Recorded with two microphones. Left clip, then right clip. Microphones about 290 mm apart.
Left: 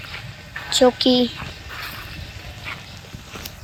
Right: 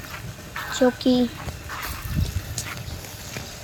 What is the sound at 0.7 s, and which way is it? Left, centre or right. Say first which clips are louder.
Speech: left 5 dB; centre.